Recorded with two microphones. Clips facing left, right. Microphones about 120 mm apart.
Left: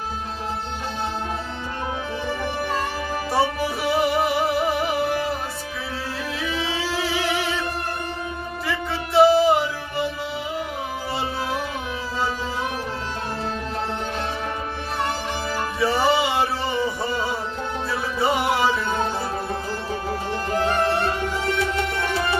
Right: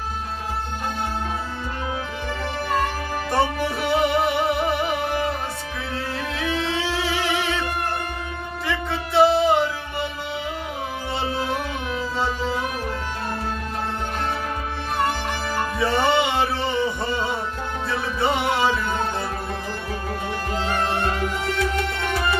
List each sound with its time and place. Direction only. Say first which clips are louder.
3.3 s music: even; centre (ahead or behind)
6.4 s music: right 3 dB; 5° left (ahead or behind)
11.3 s carnatic music: right 1 dB; centre (ahead or behind)
15.8 s music: even; centre (ahead or behind)
19.9 s music: left 2 dB; 30° left (ahead or behind)
20.5 s music: left 5 dB; 45° left (ahead or behind)